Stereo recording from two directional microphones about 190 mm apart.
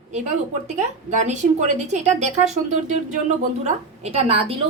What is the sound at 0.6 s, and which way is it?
A woman's voice, 40° right (ahead or behind).